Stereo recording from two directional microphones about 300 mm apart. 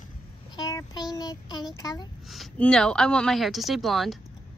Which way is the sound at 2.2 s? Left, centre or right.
Centre.